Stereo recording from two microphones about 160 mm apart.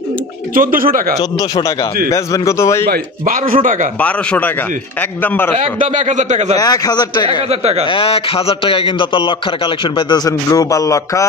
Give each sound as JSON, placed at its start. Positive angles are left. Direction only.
{"t": 0.6, "sound": "a man's voice", "side_deg": -60}
{"t": 2.0, "sound": "a man's voice", "side_deg": 20}
{"t": 2.9, "sound": "a man's voice", "side_deg": -60}
{"t": 4.0, "sound": "a man's voice", "side_deg": 10}
{"t": 5.6, "sound": "a man's voice", "side_deg": -50}
{"t": 6.6, "sound": "a man's voice", "side_deg": 25}